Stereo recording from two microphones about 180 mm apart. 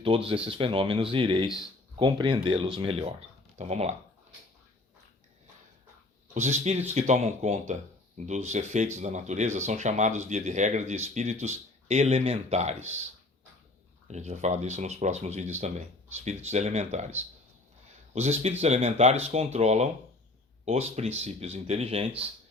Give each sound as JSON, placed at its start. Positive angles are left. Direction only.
{"t": 0.4, "sound": "speech", "side_deg": -30}
{"t": 6.3, "sound": "speech", "side_deg": -40}
{"t": 14.1, "sound": "speech", "side_deg": -40}
{"t": 18.1, "sound": "speech", "side_deg": -35}